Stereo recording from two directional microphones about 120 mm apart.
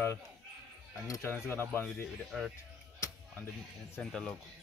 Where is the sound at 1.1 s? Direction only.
25° left (ahead or behind).